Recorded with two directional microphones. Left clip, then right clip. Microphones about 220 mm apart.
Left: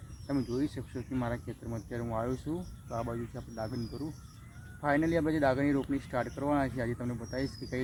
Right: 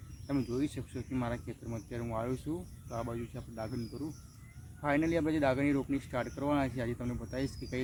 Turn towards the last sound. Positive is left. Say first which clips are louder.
# left 2 dB
turn(degrees=0)  # may be behind; listen again after turning